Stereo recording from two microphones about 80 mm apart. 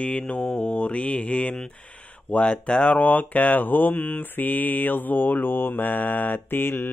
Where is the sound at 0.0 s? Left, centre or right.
Centre.